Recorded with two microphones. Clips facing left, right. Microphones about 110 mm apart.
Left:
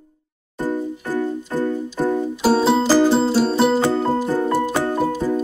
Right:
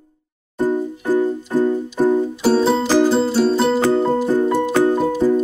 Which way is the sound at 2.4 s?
5° left (ahead or behind).